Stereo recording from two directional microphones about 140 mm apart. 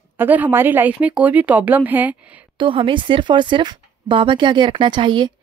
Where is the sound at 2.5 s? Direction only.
35° right (ahead or behind).